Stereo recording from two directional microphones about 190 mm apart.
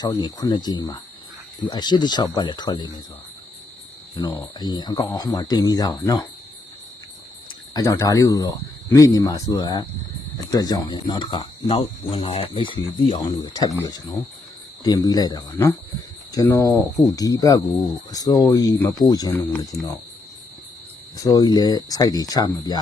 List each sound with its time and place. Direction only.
0.0 s speech: 20° left (ahead or behind)
4.1 s speech: 20° left (ahead or behind)
7.7 s speech: 20° left (ahead or behind)
21.2 s speech: 20° left (ahead or behind)